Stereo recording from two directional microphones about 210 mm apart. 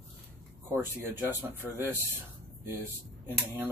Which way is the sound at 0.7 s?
10° right (ahead or behind).